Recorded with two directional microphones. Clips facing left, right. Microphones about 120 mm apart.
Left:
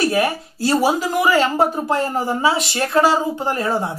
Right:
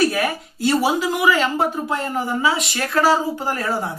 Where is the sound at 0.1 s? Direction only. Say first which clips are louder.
Left 4 dB; 35° left (ahead or behind).